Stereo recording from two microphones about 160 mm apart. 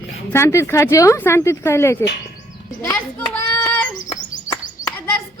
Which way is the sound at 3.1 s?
10° left (ahead or behind).